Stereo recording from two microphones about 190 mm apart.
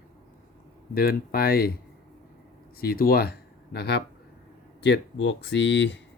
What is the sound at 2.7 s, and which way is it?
Speech, 50° left (ahead or behind).